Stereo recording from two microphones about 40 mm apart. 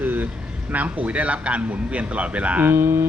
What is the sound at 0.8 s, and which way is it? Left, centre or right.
Speech, right.